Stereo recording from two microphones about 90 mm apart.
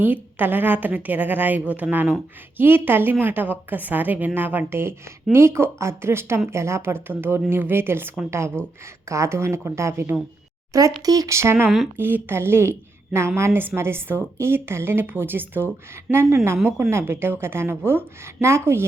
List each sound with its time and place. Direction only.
0.0 s a woman's voice: 20° right (ahead or behind)